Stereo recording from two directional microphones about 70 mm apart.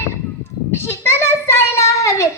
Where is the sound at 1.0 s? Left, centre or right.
Left.